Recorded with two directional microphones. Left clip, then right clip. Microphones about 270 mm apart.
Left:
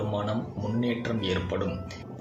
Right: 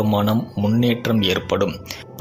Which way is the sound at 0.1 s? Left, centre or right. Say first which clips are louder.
Right 10 dB; right.